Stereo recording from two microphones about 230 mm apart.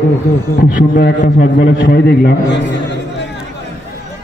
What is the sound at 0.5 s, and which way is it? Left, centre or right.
A man's voice, left.